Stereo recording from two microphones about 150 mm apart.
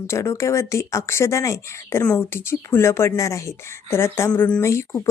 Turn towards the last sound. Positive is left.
turn(degrees=20)  # may be behind; listen again after turning